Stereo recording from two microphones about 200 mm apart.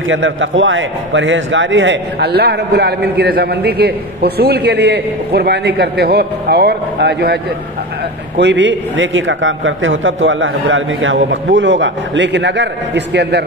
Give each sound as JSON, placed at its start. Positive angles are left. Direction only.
{"t": 0.1, "sound": "a man's voice", "side_deg": -70}
{"t": 8.4, "sound": "a man's voice", "side_deg": -60}